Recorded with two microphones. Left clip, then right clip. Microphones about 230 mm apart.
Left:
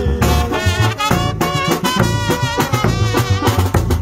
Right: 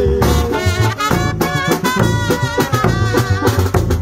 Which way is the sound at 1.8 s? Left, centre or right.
Left.